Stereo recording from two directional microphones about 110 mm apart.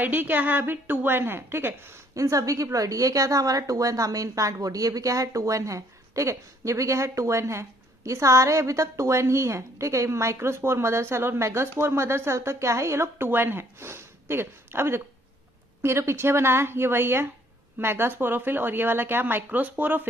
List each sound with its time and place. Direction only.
0.0 s a woman's voice: 15° right (ahead or behind)